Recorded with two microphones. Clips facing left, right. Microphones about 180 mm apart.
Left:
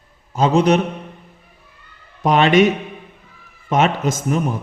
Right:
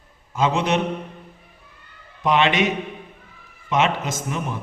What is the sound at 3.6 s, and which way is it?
Speech, 45° left (ahead or behind).